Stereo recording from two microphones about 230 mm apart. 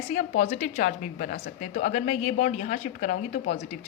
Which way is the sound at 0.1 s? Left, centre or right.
Left.